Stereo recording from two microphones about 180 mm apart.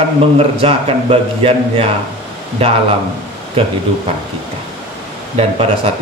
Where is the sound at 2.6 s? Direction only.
35° right (ahead or behind).